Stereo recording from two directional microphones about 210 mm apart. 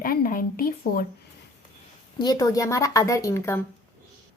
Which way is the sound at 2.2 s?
20° left (ahead or behind).